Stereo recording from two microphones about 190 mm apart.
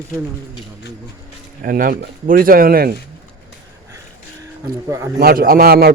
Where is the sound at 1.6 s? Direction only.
50° right (ahead or behind).